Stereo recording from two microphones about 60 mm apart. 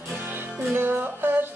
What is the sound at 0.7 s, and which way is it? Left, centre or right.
Music, right.